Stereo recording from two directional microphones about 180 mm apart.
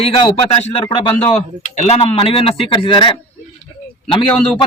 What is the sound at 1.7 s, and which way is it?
A man's voice, 35° left (ahead or behind).